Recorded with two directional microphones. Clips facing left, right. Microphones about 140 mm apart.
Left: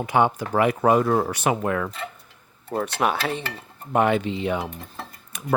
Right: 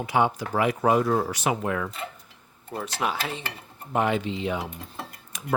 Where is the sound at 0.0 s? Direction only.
55° left (ahead or behind).